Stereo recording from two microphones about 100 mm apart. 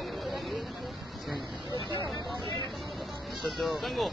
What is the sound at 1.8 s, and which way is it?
Vehicle, 50° left (ahead or behind).